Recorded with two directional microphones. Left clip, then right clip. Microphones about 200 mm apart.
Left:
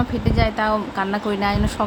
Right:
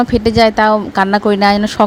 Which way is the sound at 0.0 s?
45° right (ahead or behind).